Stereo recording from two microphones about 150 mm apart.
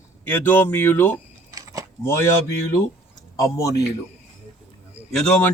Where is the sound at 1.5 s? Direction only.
25° right (ahead or behind).